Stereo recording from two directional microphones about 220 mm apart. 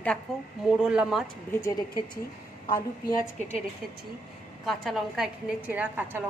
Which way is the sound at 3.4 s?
30° left (ahead or behind).